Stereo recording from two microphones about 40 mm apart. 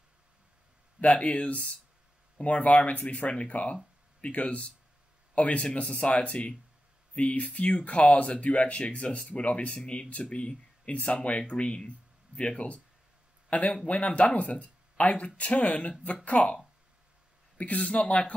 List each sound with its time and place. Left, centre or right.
1.0 s speech: left
10.9 s a man's voice: left
17.6 s speech: left